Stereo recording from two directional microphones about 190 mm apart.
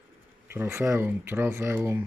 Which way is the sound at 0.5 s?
10° right (ahead or behind).